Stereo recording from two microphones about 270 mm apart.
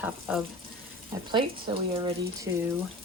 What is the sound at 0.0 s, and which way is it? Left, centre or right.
Speech, centre.